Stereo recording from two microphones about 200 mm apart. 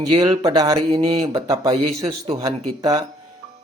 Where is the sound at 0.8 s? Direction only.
30° right (ahead or behind).